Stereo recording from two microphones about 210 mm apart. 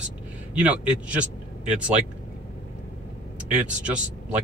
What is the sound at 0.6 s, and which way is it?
Speech, 5° right (ahead or behind).